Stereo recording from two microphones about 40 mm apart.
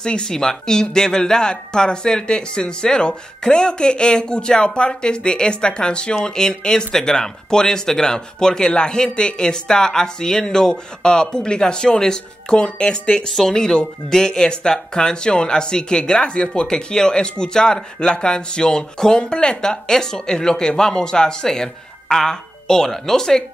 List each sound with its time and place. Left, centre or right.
0.0 s speech: centre
13.3 s speech: centre